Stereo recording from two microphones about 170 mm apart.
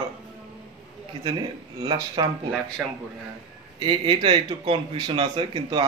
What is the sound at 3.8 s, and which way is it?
A man's voice, 30° right (ahead or behind).